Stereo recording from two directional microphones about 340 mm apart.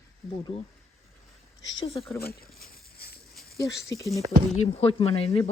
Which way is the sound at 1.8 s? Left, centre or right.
Centre.